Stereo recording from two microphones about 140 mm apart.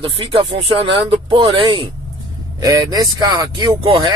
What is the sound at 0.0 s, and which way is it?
Speech, 40° right (ahead or behind).